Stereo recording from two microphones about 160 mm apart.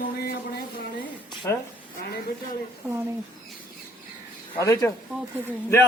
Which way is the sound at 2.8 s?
5° right (ahead or behind).